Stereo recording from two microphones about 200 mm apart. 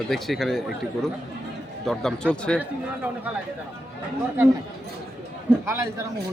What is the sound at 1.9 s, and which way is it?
Speech, 5° left (ahead or behind).